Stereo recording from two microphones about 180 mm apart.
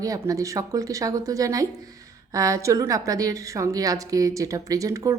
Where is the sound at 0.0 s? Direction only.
20° right (ahead or behind).